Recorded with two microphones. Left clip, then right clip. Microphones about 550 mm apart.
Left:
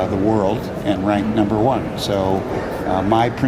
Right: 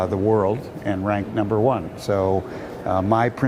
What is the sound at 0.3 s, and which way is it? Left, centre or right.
Speech, right.